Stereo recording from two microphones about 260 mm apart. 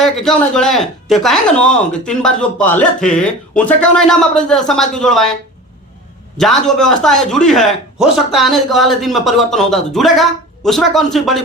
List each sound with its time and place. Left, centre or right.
0.0 s speech: centre
6.3 s speech: centre